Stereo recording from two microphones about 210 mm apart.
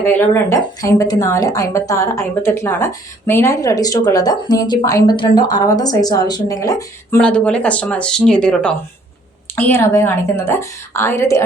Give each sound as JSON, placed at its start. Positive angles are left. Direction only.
{"t": 0.0, "sound": "speech", "side_deg": 10}